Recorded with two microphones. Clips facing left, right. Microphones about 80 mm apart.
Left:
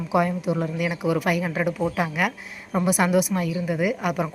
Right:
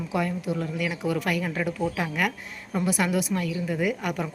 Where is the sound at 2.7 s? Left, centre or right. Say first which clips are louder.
Left 5 dB; left.